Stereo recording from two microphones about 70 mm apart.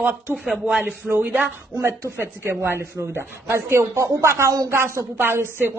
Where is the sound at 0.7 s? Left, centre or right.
Centre.